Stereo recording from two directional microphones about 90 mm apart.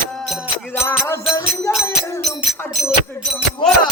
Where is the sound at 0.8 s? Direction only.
30° left (ahead or behind).